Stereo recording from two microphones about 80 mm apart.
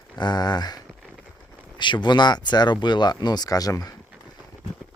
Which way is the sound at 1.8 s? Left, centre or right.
Left.